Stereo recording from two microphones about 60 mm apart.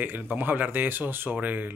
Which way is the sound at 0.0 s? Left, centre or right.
Right.